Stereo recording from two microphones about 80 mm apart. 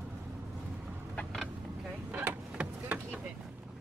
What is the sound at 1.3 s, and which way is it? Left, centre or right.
Vehicle, centre.